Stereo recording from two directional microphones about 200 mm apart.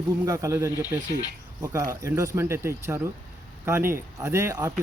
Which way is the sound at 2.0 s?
15° right (ahead or behind).